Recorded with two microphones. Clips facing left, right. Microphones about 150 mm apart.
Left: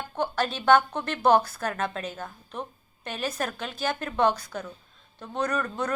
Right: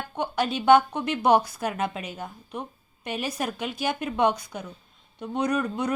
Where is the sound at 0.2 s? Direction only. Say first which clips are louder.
Right 1 dB; 15° right (ahead or behind).